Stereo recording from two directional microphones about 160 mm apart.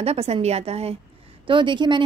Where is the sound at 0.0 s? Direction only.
40° right (ahead or behind).